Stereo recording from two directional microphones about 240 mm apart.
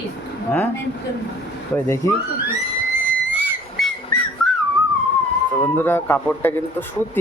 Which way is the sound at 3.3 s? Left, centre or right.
Centre.